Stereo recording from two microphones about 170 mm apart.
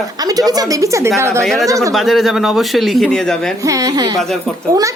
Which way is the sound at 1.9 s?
Centre (ahead or behind).